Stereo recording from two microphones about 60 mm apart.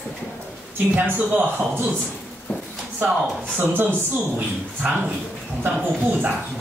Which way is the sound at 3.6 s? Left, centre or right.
Right.